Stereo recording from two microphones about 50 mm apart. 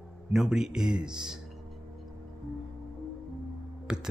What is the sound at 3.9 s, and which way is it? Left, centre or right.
Speech, centre.